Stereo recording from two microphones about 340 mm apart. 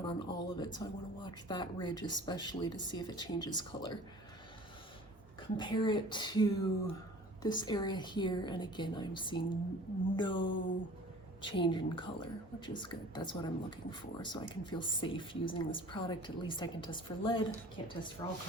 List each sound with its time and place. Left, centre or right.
0.0 s speech: centre
5.5 s speech: centre
10.5 s a sound: left
11.4 s speech: centre